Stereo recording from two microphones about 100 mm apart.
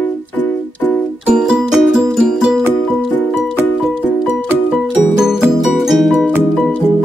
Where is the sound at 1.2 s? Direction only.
10° right (ahead or behind).